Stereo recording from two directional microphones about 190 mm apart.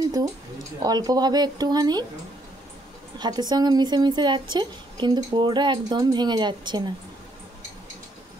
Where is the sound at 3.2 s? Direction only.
20° right (ahead or behind).